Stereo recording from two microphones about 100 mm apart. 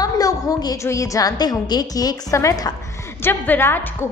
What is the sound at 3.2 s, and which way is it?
Speech, 20° left (ahead or behind).